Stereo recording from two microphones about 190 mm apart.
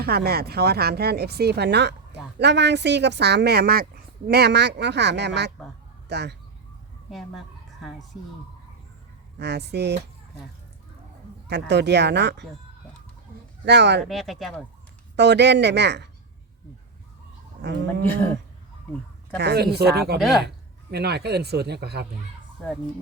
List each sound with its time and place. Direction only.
0.0 s speech: 55° right (ahead or behind)
7.1 s speech: centre (ahead or behind)
9.4 s speech: 60° right (ahead or behind)
11.4 s speech: 60° right (ahead or behind)
13.7 s speech: 65° right (ahead or behind)
14.0 s speech: centre (ahead or behind)
15.1 s speech: 65° right (ahead or behind)
17.6 s speech: 65° right (ahead or behind)
19.4 s speech: 60° right (ahead or behind)
20.1 s speech: centre (ahead or behind)
20.9 s speech: 60° right (ahead or behind)